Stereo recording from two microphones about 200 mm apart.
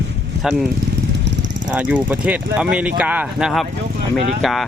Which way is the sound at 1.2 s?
65° right (ahead or behind).